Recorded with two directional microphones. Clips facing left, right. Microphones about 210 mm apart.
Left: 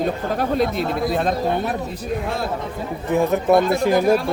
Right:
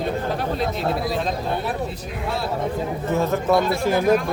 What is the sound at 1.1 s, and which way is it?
Speech, 55° left (ahead or behind).